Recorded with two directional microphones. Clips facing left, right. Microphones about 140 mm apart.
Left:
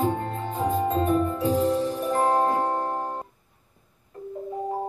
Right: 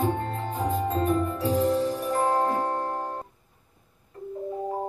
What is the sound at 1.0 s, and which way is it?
Music, 10° left (ahead or behind).